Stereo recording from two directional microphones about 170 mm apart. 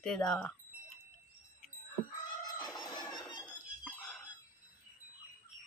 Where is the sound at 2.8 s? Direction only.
20° left (ahead or behind).